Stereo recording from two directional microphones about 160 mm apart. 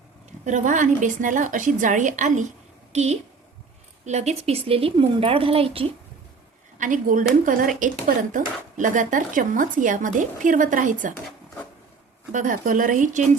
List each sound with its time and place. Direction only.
0.4 s a woman's voice: 50° right (ahead or behind); by 5.9 s 35° right (ahead or behind)
6.7 s a woman's voice: 55° right (ahead or behind)
12.3 s speech: 55° right (ahead or behind)